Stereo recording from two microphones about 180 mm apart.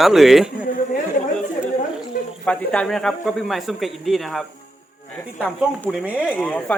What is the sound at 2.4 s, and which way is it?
A man's voice, 5° left (ahead or behind).